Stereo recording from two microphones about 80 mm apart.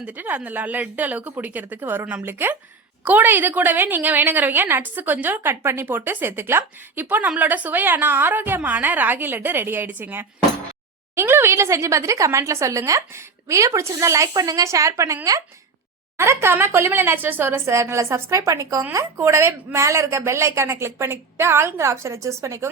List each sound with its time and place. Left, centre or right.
0.0 s a woman's voice: right